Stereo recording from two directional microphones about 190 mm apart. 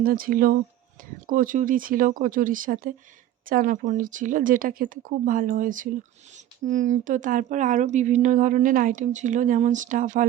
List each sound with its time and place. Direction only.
0.0 s speech: 50° right (ahead or behind)